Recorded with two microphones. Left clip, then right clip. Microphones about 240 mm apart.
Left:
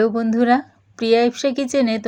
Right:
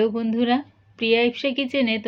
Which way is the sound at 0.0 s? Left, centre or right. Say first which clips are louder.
Left 4 dB; left.